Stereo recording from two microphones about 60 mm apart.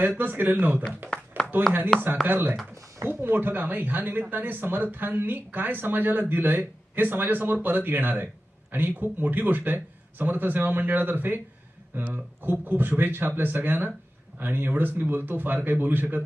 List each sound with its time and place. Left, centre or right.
0.0 s speech: right
1.4 s a sound: right
2.2 s speech: right